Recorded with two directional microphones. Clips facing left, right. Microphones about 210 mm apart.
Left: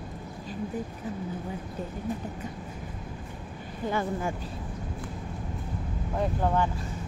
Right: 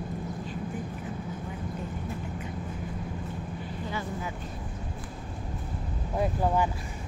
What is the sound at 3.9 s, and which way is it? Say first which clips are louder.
Speech: left 7 dB; 50° left (ahead or behind).